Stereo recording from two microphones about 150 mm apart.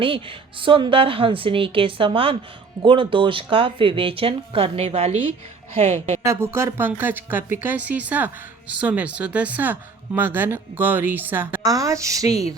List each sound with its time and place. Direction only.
0.0 s a woman's voice: 35° right (ahead or behind)
6.2 s speech: 20° right (ahead or behind)